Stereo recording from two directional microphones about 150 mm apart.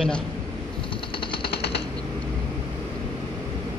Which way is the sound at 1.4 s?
90° left.